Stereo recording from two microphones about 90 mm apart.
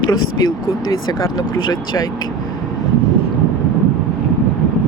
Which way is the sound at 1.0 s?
45° left (ahead or behind).